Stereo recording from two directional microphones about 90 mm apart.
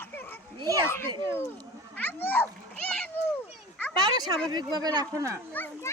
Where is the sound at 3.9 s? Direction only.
50° right (ahead or behind).